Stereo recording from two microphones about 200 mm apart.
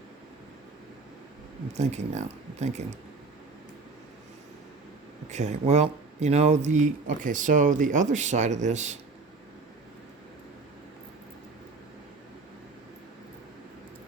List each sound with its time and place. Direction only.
1.7 s speech: 35° right (ahead or behind)
5.3 s speech: 35° right (ahead or behind)